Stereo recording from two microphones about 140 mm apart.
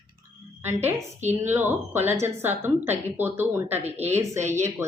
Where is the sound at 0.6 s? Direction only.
15° right (ahead or behind).